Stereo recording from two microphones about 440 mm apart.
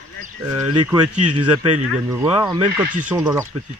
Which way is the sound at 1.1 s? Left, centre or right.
Right.